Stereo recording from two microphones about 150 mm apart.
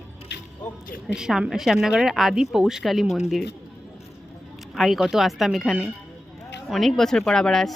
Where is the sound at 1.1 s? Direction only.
5° right (ahead or behind).